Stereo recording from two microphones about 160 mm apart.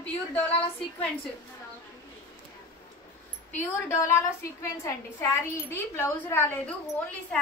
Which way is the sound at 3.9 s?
15° left (ahead or behind).